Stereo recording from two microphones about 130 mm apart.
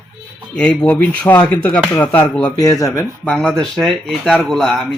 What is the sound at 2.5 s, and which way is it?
Speech, 25° left (ahead or behind).